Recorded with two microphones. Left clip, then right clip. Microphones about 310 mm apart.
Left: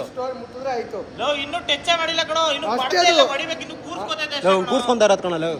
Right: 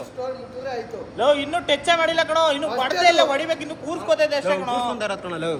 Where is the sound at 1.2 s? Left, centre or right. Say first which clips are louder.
Right 4 dB; centre.